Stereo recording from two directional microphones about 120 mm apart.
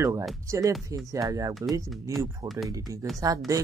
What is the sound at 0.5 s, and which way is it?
Speech, 25° right (ahead or behind).